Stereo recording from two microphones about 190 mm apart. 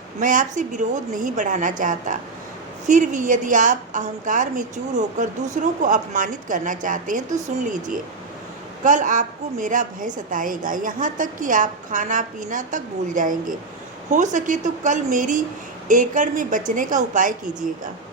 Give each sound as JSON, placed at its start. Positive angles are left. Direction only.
{"t": 0.2, "sound": "a woman's voice", "side_deg": -45}